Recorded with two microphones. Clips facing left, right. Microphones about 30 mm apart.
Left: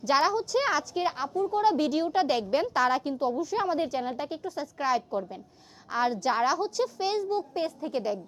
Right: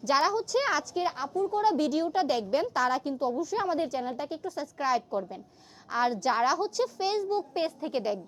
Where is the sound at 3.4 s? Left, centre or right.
Left.